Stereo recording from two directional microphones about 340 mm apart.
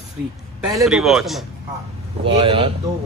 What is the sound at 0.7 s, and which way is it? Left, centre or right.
Speech, centre.